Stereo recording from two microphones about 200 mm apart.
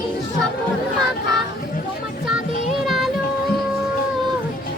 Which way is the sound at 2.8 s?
Centre (ahead or behind).